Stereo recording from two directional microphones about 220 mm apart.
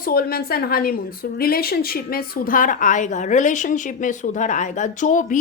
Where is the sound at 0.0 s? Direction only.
40° left (ahead or behind).